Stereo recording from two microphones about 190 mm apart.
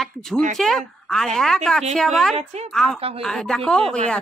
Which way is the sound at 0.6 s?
Centre (ahead or behind).